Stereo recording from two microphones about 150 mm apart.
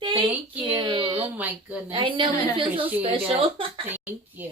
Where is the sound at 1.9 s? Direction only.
35° right (ahead or behind).